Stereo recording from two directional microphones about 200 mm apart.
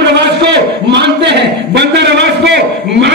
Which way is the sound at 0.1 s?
60° right (ahead or behind).